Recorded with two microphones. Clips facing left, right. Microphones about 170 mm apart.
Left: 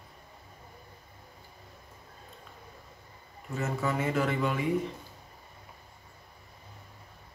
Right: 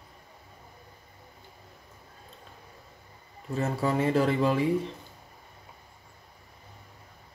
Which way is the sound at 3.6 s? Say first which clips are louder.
Right 4 dB; 35° right (ahead or behind).